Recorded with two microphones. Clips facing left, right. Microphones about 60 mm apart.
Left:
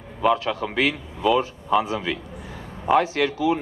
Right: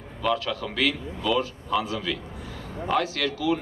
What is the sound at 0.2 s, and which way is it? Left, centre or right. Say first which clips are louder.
A man's voice: left 5 dB; left.